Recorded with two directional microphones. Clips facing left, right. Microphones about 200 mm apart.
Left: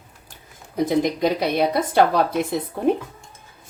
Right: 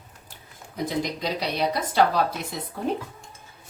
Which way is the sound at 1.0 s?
50° left (ahead or behind).